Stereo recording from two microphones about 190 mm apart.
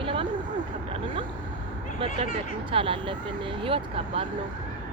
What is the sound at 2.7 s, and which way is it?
Speech, 30° right (ahead or behind).